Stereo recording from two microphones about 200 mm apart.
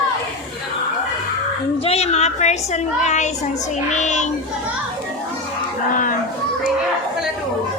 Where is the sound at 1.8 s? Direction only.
30° left (ahead or behind).